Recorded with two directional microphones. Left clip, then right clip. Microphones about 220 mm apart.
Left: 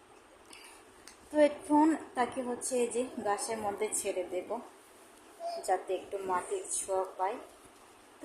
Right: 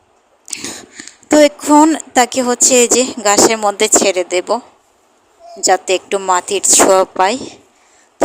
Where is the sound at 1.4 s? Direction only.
40° right (ahead or behind).